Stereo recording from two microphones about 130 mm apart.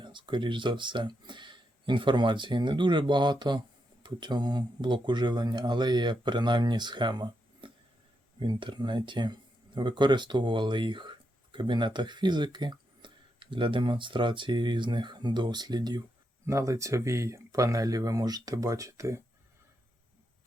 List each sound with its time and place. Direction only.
0.0 s speech: 35° right (ahead or behind)